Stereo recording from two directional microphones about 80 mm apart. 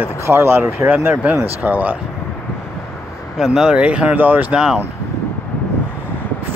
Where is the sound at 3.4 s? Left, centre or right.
Centre.